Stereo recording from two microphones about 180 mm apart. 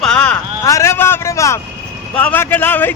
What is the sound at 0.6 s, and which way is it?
A man's voice, 15° left (ahead or behind).